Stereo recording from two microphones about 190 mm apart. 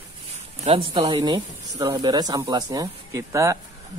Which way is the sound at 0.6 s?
30° right (ahead or behind).